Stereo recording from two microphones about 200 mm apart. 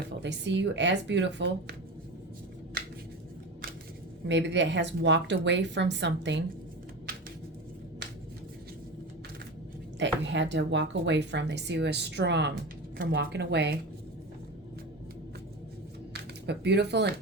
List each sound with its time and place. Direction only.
0.2 s speech: 60° right (ahead or behind)
4.3 s speech: 65° right (ahead or behind)
10.0 s speech: 65° right (ahead or behind)
16.1 s speech: 55° right (ahead or behind)